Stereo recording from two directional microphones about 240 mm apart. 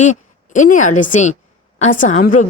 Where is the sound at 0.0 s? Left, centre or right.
Left.